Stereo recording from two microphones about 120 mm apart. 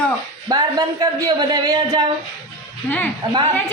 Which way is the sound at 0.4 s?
30° right (ahead or behind).